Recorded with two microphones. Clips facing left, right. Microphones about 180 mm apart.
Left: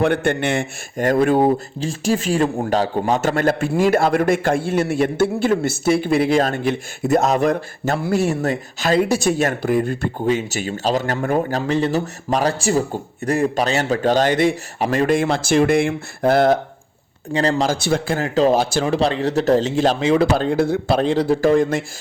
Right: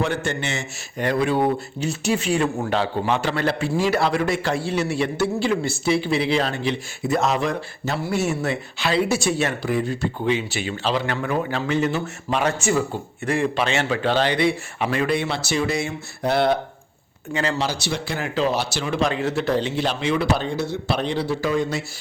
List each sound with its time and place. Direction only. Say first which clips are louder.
0.0 s speech: left 6 dB; 60° left (ahead or behind)
8.2 s speech: left 4 dB; 35° left (ahead or behind)